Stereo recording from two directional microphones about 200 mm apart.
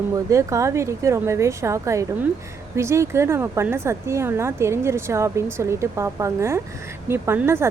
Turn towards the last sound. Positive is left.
turn(degrees=-10)  # may be behind; listen again after turning